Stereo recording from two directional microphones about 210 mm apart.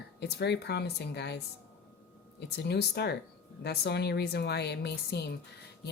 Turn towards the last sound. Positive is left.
turn(degrees=50)  # may be behind; listen again after turning